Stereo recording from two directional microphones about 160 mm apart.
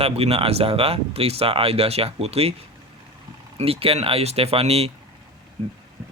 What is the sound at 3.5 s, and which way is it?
Speech, 35° right (ahead or behind).